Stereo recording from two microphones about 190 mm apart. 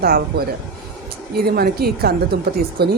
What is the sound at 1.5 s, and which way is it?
A woman's voice, 55° right (ahead or behind).